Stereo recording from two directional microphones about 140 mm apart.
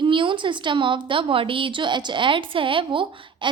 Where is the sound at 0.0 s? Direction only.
35° right (ahead or behind).